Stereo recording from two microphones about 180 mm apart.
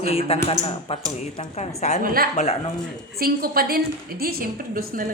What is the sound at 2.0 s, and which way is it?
A woman's voice, 55° right (ahead or behind).